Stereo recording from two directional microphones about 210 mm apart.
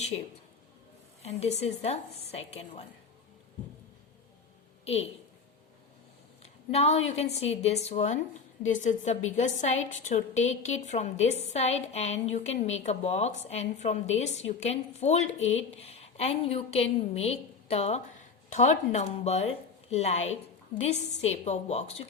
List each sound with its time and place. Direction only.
1.2 s a woman's voice: 30° left (ahead or behind)
6.4 s a sound: 30° left (ahead or behind)
7.1 s a woman's voice: 30° left (ahead or behind)